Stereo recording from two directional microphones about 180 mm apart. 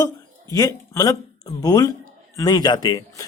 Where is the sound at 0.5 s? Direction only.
20° left (ahead or behind).